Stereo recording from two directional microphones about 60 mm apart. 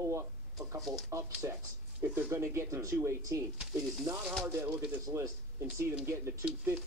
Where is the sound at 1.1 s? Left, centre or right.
Right.